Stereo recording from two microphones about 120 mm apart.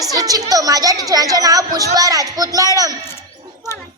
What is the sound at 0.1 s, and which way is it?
A woman's voice, 30° right (ahead or behind).